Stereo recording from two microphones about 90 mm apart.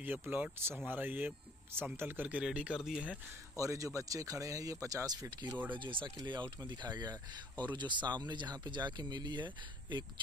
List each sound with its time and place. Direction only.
0.0 s speech: 20° right (ahead or behind)
3.5 s speech: 35° right (ahead or behind)
5.7 s speech: 65° right (ahead or behind)